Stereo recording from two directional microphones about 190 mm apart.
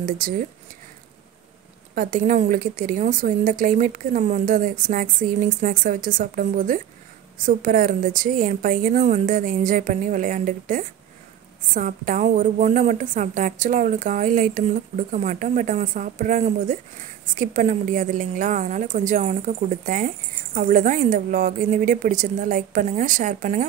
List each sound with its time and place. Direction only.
0.0 s a woman's voice: 45° right (ahead or behind)
2.0 s a woman's voice: 45° right (ahead or behind)